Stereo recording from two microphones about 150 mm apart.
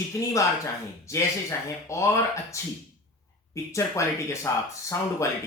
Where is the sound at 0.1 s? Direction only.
20° left (ahead or behind).